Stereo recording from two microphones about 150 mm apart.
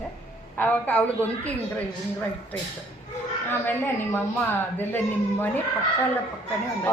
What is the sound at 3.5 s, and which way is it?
A woman's voice, 15° left (ahead or behind).